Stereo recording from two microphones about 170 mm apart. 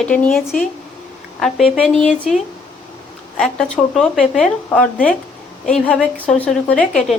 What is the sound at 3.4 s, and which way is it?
A woman's voice, 5° left (ahead or behind).